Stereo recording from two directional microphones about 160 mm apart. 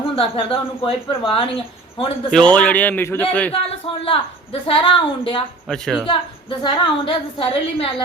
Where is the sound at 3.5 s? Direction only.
35° left (ahead or behind).